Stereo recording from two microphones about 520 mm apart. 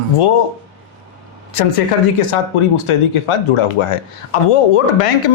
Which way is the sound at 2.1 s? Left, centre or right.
Left.